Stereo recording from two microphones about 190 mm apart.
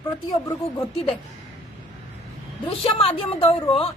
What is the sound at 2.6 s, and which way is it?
A woman's voice, 30° left (ahead or behind).